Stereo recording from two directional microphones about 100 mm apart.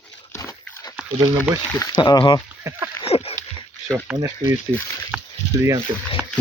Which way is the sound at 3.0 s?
85° left.